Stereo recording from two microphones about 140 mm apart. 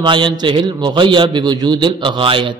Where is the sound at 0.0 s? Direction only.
35° right (ahead or behind).